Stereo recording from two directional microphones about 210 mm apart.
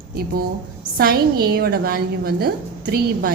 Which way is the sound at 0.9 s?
45° right (ahead or behind).